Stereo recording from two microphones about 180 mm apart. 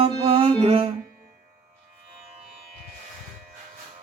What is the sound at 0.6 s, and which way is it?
Music, 30° right (ahead or behind).